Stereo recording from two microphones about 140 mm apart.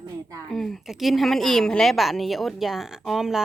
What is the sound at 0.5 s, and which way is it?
A woman's voice, centre (ahead or behind).